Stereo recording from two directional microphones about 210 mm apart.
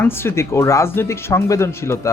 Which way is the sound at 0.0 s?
10° left (ahead or behind).